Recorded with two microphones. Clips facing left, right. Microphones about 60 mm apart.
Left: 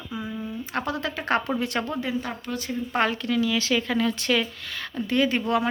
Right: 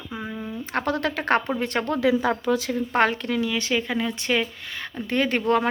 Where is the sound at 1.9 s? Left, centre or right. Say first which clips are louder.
Right 8 dB; right.